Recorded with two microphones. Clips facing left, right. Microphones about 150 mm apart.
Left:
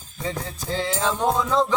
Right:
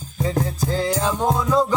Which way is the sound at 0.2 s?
40° right (ahead or behind).